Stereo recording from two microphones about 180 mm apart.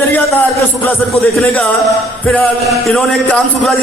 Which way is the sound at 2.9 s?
5° left (ahead or behind).